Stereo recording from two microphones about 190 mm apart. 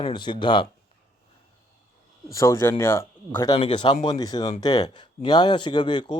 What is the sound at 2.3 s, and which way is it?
Speech, 15° left (ahead or behind).